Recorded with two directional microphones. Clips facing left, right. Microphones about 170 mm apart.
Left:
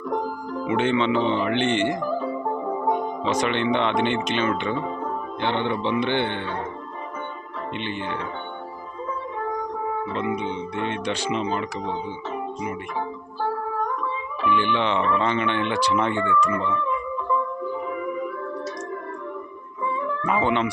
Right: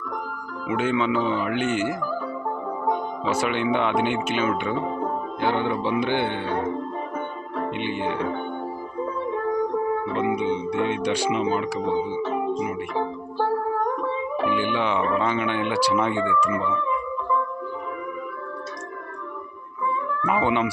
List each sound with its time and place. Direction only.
0.7 s speech: 5° right (ahead or behind)
2.0 s music: 20° left (ahead or behind)
3.2 s speech: 10° right (ahead or behind)
7.8 s speech: 10° right (ahead or behind)
10.2 s speech: 10° right (ahead or behind)
11.9 s music: 60° right (ahead or behind)
14.5 s speech: 5° right (ahead or behind)
20.2 s speech: 10° right (ahead or behind)